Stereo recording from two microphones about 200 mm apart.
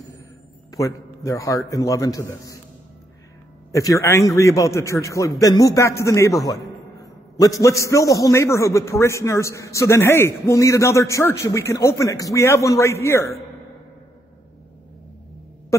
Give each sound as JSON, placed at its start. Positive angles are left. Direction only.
{"t": 0.7, "sound": "a man's voice", "side_deg": 15}
{"t": 3.7, "sound": "a man's voice", "side_deg": 15}